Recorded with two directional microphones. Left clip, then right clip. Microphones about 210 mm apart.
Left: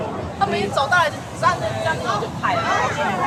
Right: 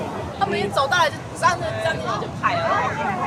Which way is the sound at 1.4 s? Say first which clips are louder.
Even; 55° right (ahead or behind).